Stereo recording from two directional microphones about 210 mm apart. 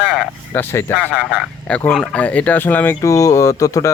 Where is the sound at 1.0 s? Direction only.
5° right (ahead or behind).